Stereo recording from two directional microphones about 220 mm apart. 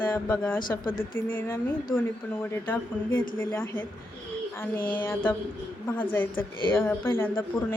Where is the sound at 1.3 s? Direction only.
10° left (ahead or behind).